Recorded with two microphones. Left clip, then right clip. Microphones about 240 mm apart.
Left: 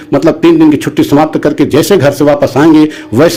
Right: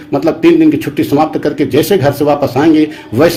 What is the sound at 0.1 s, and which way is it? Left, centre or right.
A man's voice, left.